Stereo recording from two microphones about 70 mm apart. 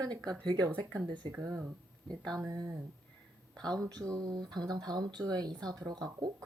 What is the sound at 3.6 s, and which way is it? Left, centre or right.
Speech, right.